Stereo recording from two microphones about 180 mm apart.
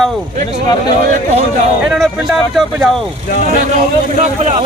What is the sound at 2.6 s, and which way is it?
Speech, centre (ahead or behind).